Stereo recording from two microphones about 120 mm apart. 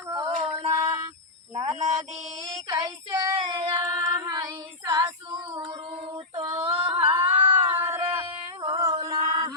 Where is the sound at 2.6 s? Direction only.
35° right (ahead or behind).